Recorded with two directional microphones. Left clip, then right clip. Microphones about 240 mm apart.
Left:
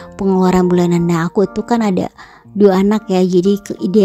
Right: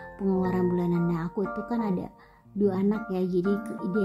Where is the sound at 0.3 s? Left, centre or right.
Left.